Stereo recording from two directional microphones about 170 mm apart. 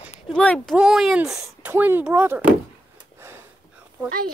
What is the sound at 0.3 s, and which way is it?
Speech, 5° left (ahead or behind).